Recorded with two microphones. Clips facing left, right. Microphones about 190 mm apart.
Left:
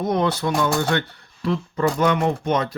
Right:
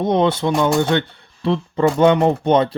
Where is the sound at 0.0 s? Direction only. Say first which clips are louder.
Right 4 dB; 25° right (ahead or behind).